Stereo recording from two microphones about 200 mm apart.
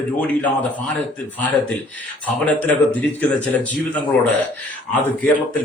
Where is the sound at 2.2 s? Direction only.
5° left (ahead or behind).